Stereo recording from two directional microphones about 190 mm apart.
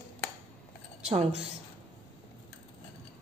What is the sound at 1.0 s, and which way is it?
Speech, 30° right (ahead or behind).